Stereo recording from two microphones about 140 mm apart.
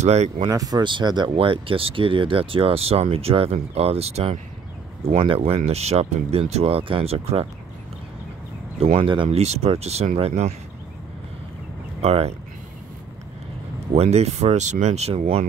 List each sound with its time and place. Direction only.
0.0 s speech: 50° right (ahead or behind)
0.5 s speech: 25° right (ahead or behind); by 7.4 s 45° right (ahead or behind)
8.7 s speech: 40° right (ahead or behind)
12.0 s speech: 45° right (ahead or behind)
13.9 s speech: 50° right (ahead or behind)